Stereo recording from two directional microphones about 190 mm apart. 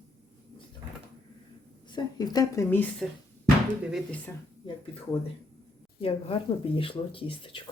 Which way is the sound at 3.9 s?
Centre (ahead or behind).